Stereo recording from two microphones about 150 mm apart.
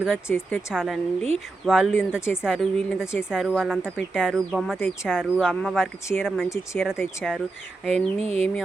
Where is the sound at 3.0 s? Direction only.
15° left (ahead or behind).